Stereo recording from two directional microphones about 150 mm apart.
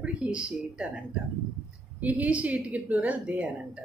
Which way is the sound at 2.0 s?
10° right (ahead or behind).